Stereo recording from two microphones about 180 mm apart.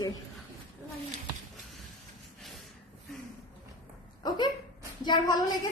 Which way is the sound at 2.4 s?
Centre (ahead or behind).